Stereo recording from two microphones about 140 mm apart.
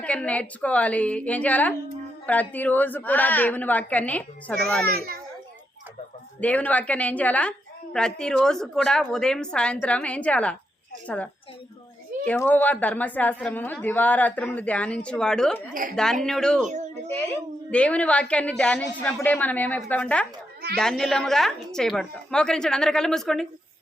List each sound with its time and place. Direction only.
0.0 s a woman's voice: 10° left (ahead or behind)
4.9 s a child's voice: 90° right
6.4 s a woman's voice: 10° left (ahead or behind)
17.7 s a woman's voice: 10° left (ahead or behind)